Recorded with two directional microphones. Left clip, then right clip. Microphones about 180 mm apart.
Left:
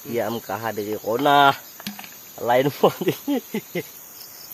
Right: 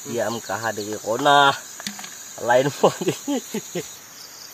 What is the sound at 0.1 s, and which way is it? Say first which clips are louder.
Speech: even; 25° left (ahead or behind).